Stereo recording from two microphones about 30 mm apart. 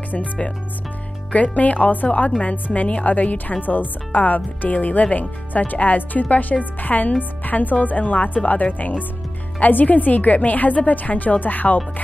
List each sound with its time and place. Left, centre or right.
1.3 s speech: left
5.1 s speech: left